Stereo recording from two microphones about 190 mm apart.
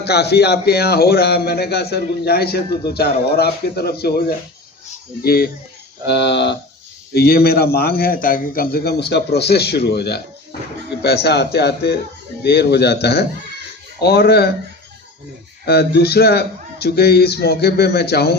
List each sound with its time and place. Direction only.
0.0 s speech: 60° left (ahead or behind)
5.2 s speech: 55° left (ahead or behind)
15.6 s speech: 60° left (ahead or behind)